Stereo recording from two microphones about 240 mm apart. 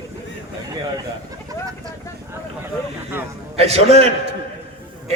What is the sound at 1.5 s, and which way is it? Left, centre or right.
Vehicle, centre.